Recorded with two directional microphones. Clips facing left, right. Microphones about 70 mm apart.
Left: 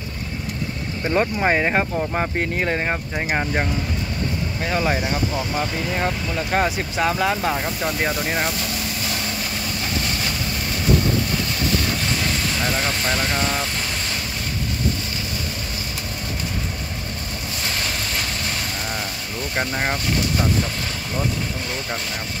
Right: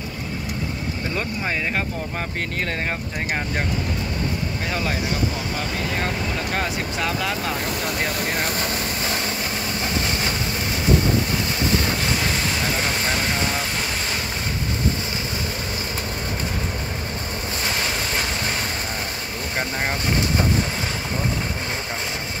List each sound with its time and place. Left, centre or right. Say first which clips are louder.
1.1 s speech: left 9 dB; left
1.8 s speech: left 5 dB; left
5.9 s speech: left 3 dB; centre